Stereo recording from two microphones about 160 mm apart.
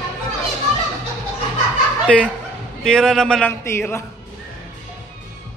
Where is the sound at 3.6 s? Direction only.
15° left (ahead or behind).